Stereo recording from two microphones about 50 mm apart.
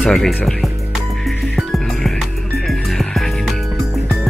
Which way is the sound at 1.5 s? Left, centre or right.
Centre.